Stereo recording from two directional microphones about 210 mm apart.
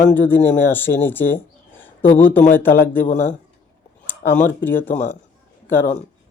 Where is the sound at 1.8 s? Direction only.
10° left (ahead or behind).